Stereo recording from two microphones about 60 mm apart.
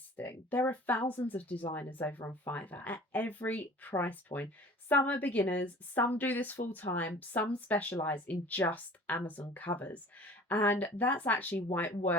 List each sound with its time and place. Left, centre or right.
0.2 s speech: left
2.6 s speech: left